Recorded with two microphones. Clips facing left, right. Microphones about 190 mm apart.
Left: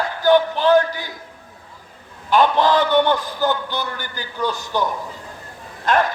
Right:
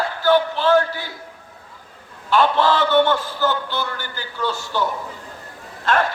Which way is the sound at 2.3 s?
15° left (ahead or behind).